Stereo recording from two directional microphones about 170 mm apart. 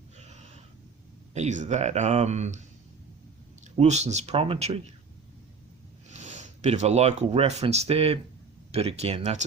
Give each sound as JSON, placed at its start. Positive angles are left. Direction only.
{"t": 1.3, "sound": "speech", "side_deg": -45}
{"t": 3.8, "sound": "speech", "side_deg": -40}
{"t": 6.1, "sound": "speech", "side_deg": -45}